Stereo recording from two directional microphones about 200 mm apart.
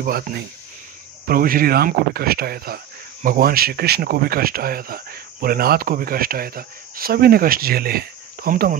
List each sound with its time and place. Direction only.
1.2 s speech: 45° right (ahead or behind)